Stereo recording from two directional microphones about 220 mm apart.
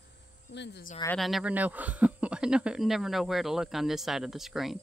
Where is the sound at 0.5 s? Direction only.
50° left (ahead or behind).